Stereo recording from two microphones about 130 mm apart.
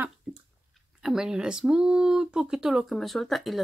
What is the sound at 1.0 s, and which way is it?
Speech, 5° right (ahead or behind).